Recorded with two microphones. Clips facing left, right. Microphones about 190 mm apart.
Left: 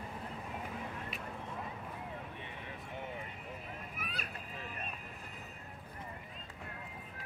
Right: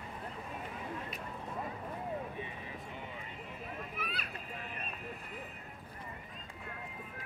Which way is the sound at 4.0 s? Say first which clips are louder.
Right 1 dB; 45° left (ahead or behind).